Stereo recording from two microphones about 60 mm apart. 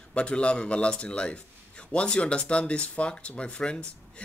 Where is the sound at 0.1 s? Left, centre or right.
Centre.